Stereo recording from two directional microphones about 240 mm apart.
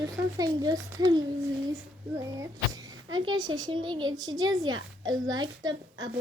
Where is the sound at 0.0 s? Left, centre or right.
Centre.